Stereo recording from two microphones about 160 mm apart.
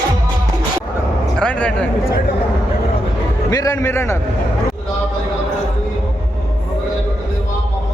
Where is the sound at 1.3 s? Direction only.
5° left (ahead or behind).